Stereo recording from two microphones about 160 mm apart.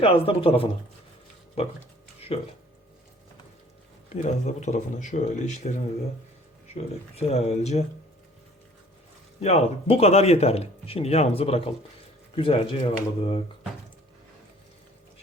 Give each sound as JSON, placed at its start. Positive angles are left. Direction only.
{"t": 0.0, "sound": "speech", "side_deg": 35}
{"t": 2.3, "sound": "speech", "side_deg": 35}
{"t": 4.1, "sound": "speech", "side_deg": 45}
{"t": 7.2, "sound": "speech", "side_deg": 40}
{"t": 9.4, "sound": "speech", "side_deg": 45}